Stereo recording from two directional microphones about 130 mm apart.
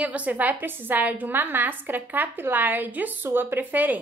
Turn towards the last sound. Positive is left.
turn(degrees=-15)  # may be behind; listen again after turning